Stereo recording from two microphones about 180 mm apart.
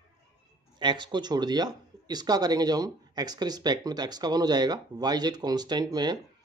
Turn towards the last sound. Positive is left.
turn(degrees=-25)  # may be behind; listen again after turning